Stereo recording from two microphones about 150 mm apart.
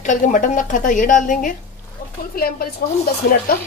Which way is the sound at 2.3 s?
85° left.